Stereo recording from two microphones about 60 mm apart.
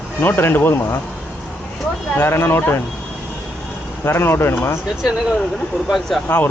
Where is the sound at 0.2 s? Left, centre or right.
Left.